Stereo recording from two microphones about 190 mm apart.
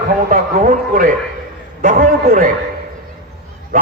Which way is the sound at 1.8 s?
45° right (ahead or behind).